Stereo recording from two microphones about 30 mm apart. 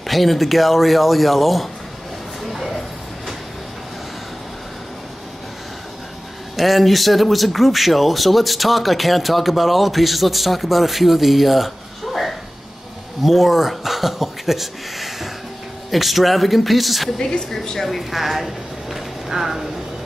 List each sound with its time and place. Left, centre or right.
0.0 s speech: centre
2.4 s a sound: centre
6.5 s speech: centre
17.2 s speech: left
17.7 s speech: centre